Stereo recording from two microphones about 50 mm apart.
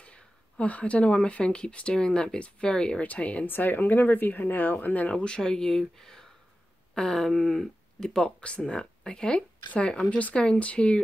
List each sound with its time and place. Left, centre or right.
0.0 s speech: left
3.0 s speech: left
3.4 s speech: left
5.1 s speech: centre